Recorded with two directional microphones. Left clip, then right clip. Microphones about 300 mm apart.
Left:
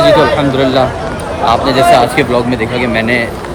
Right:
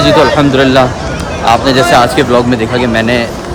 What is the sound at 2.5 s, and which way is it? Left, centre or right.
Speech, centre.